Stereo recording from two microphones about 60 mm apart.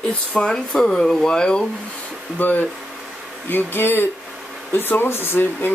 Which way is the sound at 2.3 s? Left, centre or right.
Left.